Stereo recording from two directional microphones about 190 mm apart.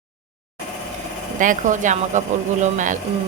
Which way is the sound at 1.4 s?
40° right (ahead or behind).